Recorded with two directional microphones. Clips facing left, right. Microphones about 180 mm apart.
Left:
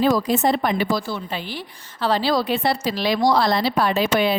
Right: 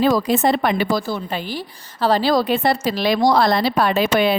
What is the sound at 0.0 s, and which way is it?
Speech, 75° right (ahead or behind).